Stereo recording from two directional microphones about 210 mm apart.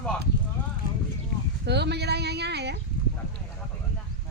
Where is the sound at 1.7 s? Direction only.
50° right (ahead or behind).